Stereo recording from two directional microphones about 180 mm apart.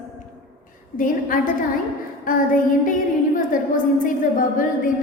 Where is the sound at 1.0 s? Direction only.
50° left (ahead or behind).